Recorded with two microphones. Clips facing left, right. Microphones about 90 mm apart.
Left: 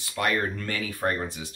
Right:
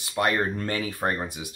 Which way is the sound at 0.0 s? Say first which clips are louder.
Right 2 dB; 30° right (ahead or behind).